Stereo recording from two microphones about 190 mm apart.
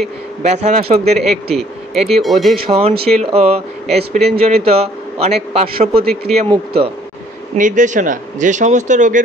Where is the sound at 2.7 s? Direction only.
30° right (ahead or behind).